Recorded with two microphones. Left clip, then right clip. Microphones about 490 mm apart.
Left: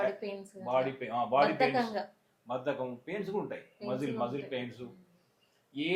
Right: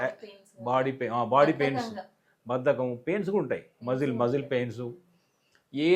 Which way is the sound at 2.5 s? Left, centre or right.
Right.